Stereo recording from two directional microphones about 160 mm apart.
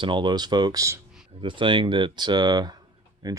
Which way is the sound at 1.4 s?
30° right (ahead or behind).